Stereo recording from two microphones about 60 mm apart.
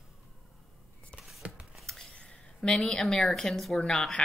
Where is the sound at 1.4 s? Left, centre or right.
Right.